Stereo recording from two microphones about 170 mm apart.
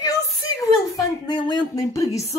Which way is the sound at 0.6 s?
25° left (ahead or behind).